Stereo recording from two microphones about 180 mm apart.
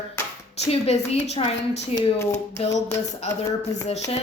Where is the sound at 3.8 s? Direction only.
35° left (ahead or behind).